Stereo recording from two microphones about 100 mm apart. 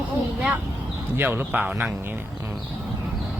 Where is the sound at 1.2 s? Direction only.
20° right (ahead or behind).